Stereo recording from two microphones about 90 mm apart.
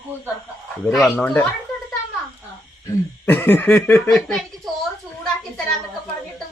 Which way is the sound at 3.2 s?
20° left (ahead or behind).